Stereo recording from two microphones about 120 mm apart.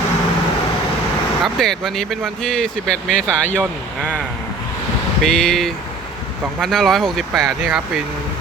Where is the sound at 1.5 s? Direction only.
5° left (ahead or behind).